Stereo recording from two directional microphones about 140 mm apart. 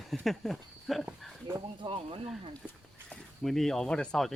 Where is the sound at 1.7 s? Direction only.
40° right (ahead or behind).